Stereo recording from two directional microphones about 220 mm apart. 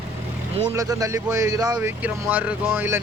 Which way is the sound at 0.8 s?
15° right (ahead or behind).